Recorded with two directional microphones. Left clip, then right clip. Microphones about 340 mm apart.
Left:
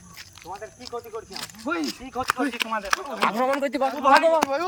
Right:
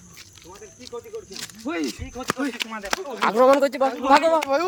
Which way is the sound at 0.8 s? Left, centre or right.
Centre.